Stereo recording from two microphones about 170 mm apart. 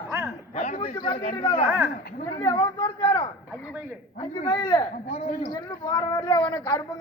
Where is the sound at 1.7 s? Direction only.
15° right (ahead or behind).